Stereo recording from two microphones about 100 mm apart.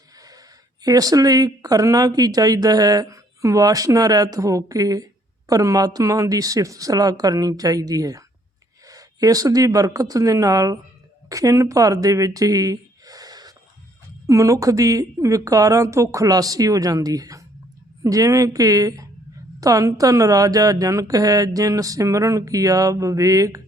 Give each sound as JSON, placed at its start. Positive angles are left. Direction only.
{"t": 0.2, "sound": "speech", "side_deg": -40}